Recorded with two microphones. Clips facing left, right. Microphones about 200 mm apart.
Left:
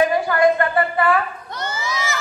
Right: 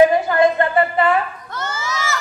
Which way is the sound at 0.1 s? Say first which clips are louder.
Right 1 dB; 25° right (ahead or behind).